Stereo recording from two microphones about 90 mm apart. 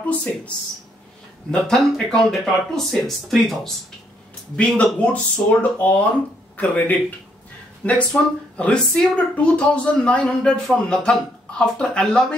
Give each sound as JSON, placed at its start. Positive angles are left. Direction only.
{"t": 1.5, "sound": "speech", "side_deg": 5}
{"t": 4.6, "sound": "speech", "side_deg": 15}